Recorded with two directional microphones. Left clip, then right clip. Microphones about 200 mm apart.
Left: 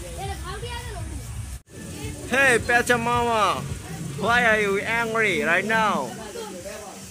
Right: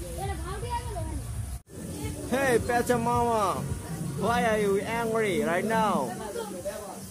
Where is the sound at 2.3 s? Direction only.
5° right (ahead or behind).